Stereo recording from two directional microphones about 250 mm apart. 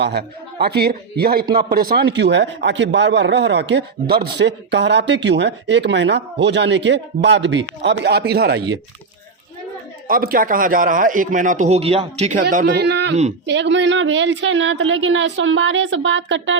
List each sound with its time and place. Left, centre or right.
0.0 s a man's voice: right
10.1 s a man's voice: right
12.6 s a man's voice: right